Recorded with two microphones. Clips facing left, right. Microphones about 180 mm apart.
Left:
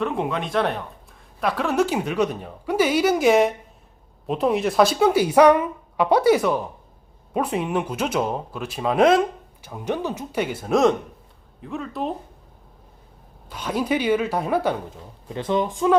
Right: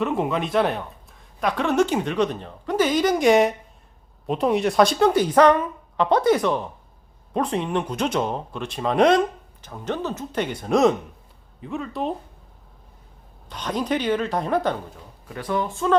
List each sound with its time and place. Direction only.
0.0 s a woman's voice: centre (ahead or behind)
13.5 s a woman's voice: 10° left (ahead or behind)
15.3 s speech: 25° left (ahead or behind)